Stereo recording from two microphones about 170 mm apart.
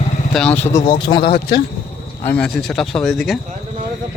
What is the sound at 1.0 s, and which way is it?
Speech, 25° left (ahead or behind).